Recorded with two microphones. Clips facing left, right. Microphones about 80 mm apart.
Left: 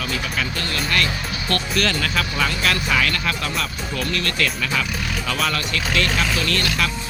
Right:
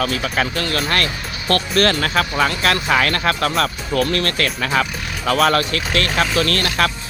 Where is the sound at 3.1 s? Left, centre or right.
Right.